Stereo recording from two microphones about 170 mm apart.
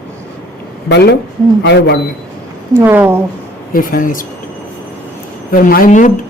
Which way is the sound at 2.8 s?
10° right (ahead or behind).